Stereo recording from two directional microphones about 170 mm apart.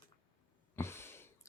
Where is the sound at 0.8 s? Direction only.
15° left (ahead or behind).